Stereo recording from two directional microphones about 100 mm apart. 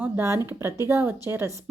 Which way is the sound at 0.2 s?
30° right (ahead or behind).